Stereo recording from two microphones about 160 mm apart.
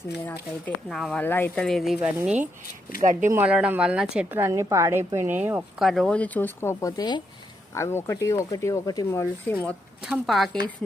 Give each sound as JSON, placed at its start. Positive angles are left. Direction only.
{"t": 0.6, "sound": "speech", "side_deg": 0}
{"t": 1.2, "sound": "speech", "side_deg": 10}
{"t": 3.0, "sound": "speech", "side_deg": -55}
{"t": 3.3, "sound": "a woman's voice", "side_deg": -5}
{"t": 5.8, "sound": "speech", "side_deg": 0}
{"t": 10.0, "sound": "speech", "side_deg": 0}